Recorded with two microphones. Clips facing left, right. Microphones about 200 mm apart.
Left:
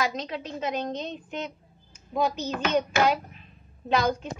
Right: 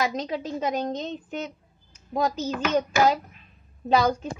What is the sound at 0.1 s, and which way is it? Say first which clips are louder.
A child's voice: right 4 dB; 40° right (ahead or behind).